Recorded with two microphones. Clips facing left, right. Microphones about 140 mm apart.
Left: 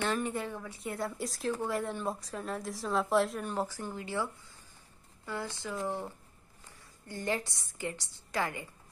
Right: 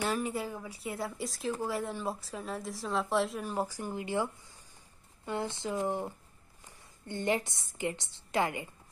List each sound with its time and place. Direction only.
0.0 s a woman's voice: 5° right (ahead or behind)